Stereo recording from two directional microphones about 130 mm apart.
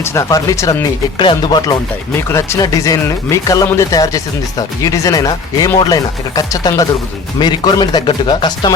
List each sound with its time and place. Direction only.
0.0 s speech: 20° left (ahead or behind)
1.2 s speech: 35° left (ahead or behind)
2.1 s speech: 20° left (ahead or behind)